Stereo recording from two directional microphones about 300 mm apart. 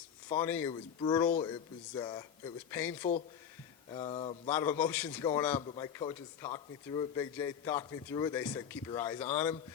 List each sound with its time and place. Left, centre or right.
0.3 s speech: centre
3.9 s speech: centre
4.4 s a man's voice: centre